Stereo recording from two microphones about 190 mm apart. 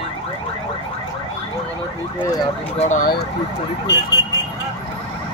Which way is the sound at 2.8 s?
40° left (ahead or behind).